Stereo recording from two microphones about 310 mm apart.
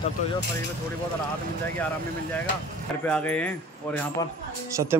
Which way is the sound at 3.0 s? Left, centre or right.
Centre.